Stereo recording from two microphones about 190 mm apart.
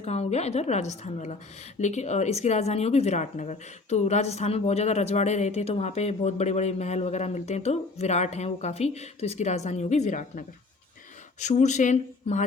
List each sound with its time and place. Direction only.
0.0 s speech: 35° left (ahead or behind)